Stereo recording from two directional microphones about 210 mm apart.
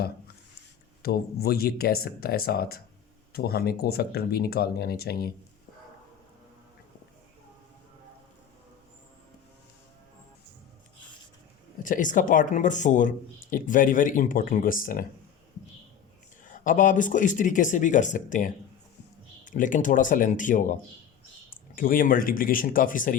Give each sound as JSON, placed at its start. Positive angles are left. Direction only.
{"t": 1.0, "sound": "speech", "side_deg": 45}
{"t": 11.8, "sound": "speech", "side_deg": 40}
{"t": 16.4, "sound": "speech", "side_deg": 40}